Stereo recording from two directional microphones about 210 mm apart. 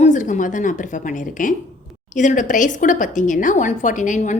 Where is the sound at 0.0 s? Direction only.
35° left (ahead or behind).